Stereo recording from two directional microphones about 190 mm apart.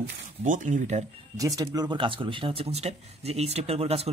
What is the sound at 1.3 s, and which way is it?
Speech, 20° right (ahead or behind).